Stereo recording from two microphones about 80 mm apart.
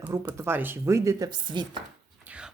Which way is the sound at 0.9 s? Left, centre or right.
Right.